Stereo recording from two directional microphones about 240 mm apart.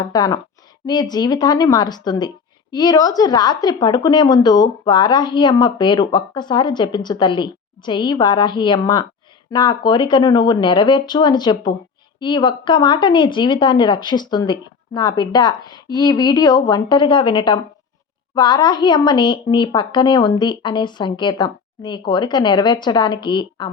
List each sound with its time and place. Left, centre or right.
0.0 s a woman's voice: centre